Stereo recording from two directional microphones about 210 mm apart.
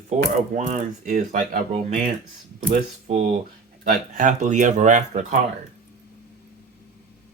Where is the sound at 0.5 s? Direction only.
35° right (ahead or behind).